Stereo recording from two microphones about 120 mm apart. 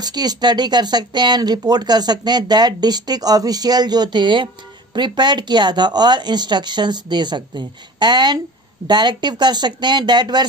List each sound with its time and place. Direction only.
0.0 s speech: 35° right (ahead or behind)